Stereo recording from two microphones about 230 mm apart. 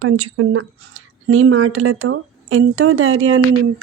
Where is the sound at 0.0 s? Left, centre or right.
Right.